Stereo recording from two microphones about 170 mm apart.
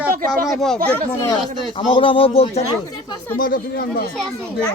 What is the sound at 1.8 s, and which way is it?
Speech, 30° left (ahead or behind).